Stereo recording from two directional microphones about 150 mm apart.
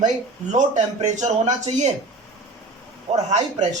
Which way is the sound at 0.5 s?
55° right (ahead or behind).